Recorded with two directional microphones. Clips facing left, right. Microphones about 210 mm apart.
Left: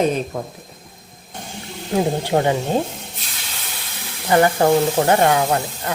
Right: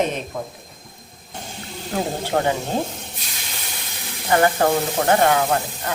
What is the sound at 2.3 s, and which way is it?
Speech, 20° left (ahead or behind).